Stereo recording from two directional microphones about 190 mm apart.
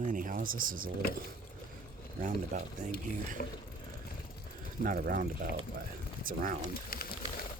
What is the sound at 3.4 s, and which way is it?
Speech, 50° left (ahead or behind).